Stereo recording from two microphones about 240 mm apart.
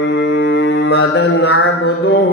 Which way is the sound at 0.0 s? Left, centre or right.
Left.